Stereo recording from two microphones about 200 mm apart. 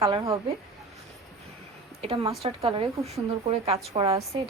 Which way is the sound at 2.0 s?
25° right (ahead or behind).